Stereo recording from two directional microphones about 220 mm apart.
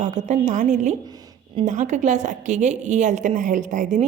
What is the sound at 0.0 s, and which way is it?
A woman's voice, 35° right (ahead or behind).